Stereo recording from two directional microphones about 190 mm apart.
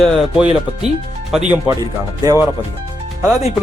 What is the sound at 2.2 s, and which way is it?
Speech, 20° right (ahead or behind).